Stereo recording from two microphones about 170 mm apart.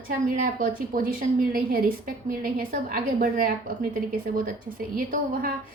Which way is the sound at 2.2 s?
55° right (ahead or behind).